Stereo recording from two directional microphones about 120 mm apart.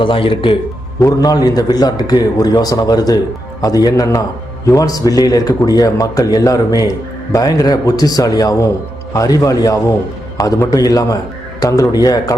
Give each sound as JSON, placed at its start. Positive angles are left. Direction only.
{"t": 0.0, "sound": "a man's voice", "side_deg": 45}
{"t": 0.9, "sound": "a man's voice", "side_deg": 30}